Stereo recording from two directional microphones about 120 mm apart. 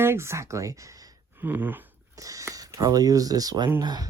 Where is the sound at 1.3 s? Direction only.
15° right (ahead or behind).